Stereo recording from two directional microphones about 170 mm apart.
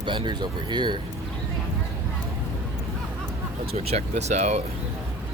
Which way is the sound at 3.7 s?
40° right (ahead or behind).